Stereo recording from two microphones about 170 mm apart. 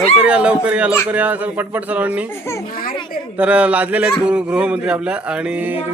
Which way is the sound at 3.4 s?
5° right (ahead or behind).